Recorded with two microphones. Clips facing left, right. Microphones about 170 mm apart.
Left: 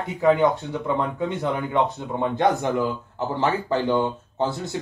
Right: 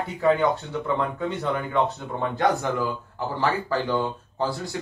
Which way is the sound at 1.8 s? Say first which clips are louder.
Left 2 dB; 20° left (ahead or behind).